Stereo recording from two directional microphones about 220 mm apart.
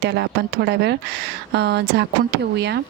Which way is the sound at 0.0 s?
50° right (ahead or behind).